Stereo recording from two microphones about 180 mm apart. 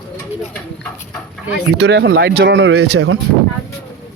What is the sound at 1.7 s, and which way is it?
Speech, 70° right (ahead or behind).